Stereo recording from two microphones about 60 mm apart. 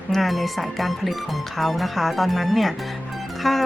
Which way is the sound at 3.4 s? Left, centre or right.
Centre.